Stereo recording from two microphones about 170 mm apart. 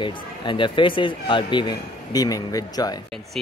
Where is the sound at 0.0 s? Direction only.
30° left (ahead or behind).